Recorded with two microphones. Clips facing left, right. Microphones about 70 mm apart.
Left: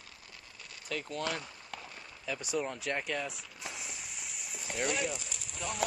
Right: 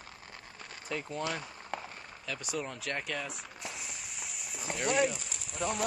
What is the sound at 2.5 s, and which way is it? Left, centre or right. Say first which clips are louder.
Speech: left 2 dB; centre.